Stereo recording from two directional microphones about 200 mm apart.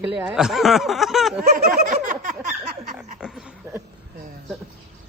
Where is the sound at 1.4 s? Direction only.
45° right (ahead or behind).